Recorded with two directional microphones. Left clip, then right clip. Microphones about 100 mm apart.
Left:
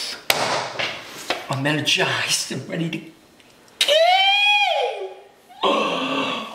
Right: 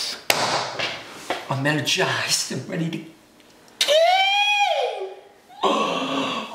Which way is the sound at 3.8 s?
Centre (ahead or behind).